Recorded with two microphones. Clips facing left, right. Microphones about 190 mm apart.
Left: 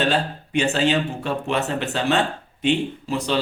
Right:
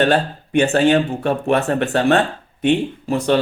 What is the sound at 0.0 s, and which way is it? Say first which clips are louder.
Speech: right 5 dB; 55° right (ahead or behind).